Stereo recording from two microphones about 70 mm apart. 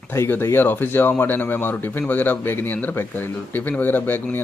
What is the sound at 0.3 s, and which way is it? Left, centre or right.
Speech, left.